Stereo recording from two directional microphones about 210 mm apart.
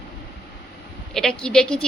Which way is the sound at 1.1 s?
Centre (ahead or behind).